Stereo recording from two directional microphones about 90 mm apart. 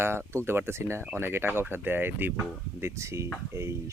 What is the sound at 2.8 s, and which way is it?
Speech, 30° right (ahead or behind).